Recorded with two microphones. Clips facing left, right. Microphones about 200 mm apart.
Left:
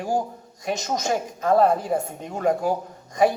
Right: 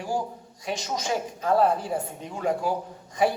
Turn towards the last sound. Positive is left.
turn(degrees=45)  # may be behind; listen again after turning